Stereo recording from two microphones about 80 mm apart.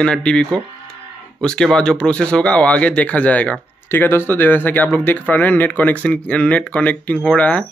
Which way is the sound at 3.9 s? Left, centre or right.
Left.